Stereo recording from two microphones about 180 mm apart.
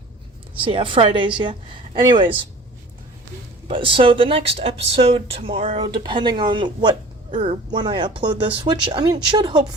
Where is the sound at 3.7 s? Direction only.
30° right (ahead or behind).